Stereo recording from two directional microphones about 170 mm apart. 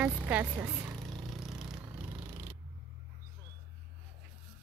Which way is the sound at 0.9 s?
Centre (ahead or behind).